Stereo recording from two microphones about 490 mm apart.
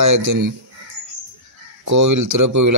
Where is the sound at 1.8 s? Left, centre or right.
Right.